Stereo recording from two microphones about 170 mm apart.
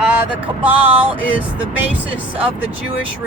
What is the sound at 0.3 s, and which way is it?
Speech, 10° right (ahead or behind).